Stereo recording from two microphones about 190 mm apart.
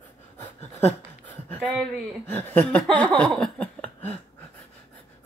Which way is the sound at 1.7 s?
10° left (ahead or behind).